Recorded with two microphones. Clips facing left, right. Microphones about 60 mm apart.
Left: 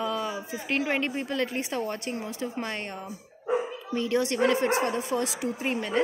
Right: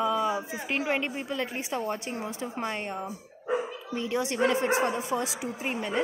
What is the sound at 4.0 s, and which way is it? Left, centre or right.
Speech, centre.